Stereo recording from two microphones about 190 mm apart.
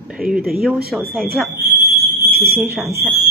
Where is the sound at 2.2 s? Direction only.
55° right (ahead or behind).